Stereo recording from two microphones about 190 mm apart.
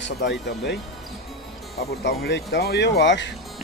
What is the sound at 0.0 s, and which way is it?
Speech, 65° left (ahead or behind).